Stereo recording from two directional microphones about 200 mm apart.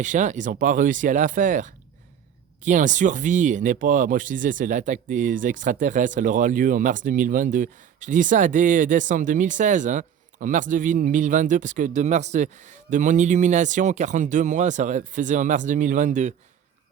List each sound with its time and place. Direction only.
0.0 s speech: 40° right (ahead or behind)